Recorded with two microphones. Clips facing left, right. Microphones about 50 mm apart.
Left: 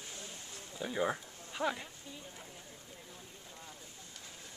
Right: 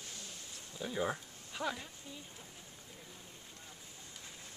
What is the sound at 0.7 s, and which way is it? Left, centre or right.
Speech, centre.